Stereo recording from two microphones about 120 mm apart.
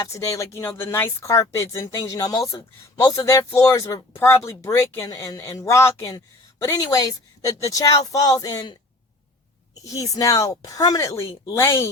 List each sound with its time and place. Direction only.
0.0 s speech: 25° left (ahead or behind)
5.0 s speech: 30° left (ahead or behind)
9.8 s speech: 30° left (ahead or behind)